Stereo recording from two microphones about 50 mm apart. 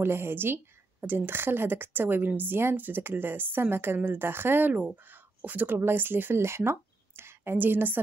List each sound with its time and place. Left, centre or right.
0.0 s a woman's voice: right